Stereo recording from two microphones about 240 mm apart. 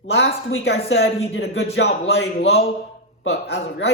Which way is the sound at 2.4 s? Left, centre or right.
Left.